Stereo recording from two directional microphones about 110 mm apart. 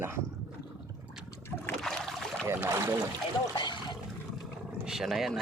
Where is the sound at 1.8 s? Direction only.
Centre (ahead or behind).